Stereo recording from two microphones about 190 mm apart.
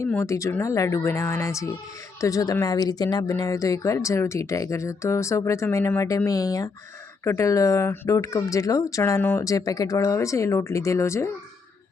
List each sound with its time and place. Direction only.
0.0 s speech: 15° left (ahead or behind)